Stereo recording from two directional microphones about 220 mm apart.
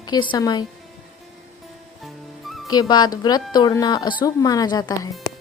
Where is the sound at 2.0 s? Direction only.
Centre (ahead or behind).